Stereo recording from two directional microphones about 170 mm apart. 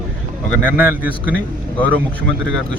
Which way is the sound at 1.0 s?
10° right (ahead or behind).